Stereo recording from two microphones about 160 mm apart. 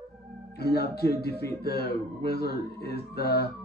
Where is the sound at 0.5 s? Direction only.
85° left.